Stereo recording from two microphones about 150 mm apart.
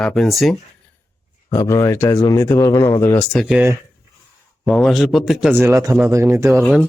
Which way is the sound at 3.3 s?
Centre (ahead or behind).